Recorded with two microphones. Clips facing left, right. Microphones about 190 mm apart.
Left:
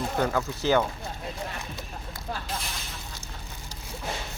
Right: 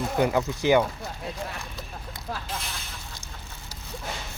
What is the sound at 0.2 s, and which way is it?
Speech, 15° right (ahead or behind).